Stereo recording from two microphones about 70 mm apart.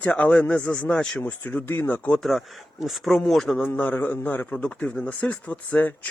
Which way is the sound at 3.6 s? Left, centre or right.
Left.